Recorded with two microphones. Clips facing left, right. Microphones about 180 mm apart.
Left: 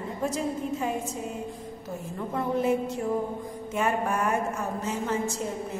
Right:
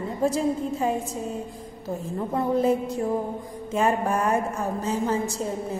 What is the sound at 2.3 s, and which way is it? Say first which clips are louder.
A woman's voice: right 3 dB; 35° right (ahead or behind).